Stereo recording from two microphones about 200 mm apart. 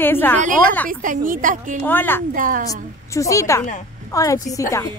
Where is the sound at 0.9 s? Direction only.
40° right (ahead or behind).